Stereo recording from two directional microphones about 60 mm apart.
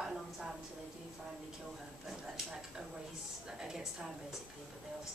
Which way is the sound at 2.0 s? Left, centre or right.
Centre.